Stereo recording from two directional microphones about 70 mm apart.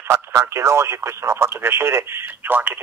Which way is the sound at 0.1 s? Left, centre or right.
Right.